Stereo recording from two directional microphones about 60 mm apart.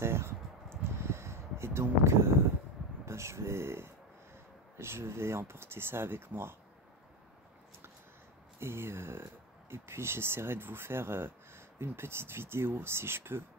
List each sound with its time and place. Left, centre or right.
0.0 s a sound: right
3.1 s speech: right
8.5 s speech: right